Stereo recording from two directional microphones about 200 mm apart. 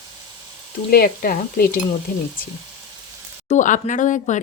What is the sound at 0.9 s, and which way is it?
Speech, 45° left (ahead or behind).